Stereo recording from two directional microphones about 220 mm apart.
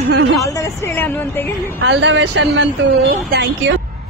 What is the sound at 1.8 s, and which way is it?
Speech, 55° right (ahead or behind).